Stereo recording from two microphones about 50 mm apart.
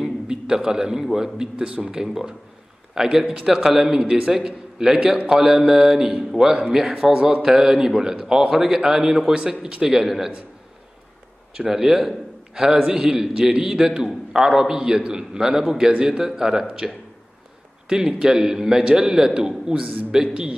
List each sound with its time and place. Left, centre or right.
0.0 s a man's voice: centre
6.9 s a man's voice: centre
11.5 s a man's voice: centre
17.8 s a man's voice: centre